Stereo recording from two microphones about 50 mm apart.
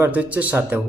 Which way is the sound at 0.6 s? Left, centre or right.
Right.